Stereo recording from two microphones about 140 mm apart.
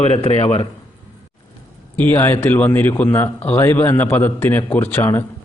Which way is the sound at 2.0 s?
15° left (ahead or behind).